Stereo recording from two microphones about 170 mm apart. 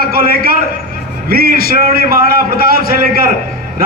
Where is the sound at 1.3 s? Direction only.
60° right (ahead or behind).